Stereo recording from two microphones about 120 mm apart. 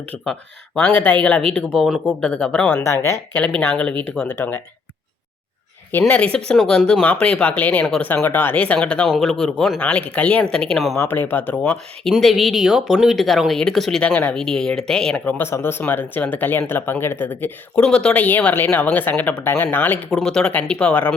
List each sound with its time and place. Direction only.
0.0 s a woman's voice: 10° left (ahead or behind)
3.6 s a woman's voice: 10° left (ahead or behind)
5.9 s a woman's voice: 15° left (ahead or behind)
10.9 s a woman's voice: 20° left (ahead or behind)
20.1 s a woman's voice: 5° left (ahead or behind)